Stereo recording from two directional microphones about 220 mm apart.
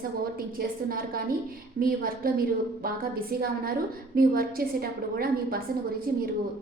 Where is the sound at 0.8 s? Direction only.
40° right (ahead or behind).